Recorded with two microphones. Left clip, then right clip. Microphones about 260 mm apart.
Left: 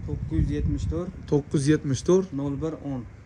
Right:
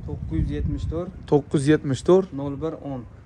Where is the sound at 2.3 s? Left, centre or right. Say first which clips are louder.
Right 1 dB; left.